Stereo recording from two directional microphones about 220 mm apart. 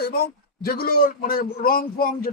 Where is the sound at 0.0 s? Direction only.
45° left (ahead or behind).